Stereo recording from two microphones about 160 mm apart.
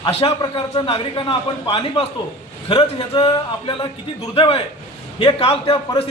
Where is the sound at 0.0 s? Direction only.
40° left (ahead or behind).